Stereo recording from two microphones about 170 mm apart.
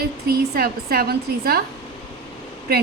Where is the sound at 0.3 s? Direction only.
65° right (ahead or behind).